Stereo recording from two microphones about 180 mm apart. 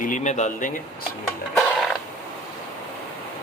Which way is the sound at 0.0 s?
45° left (ahead or behind).